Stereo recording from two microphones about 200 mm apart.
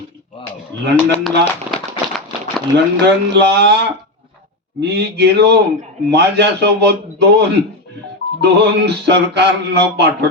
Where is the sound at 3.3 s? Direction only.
55° right (ahead or behind).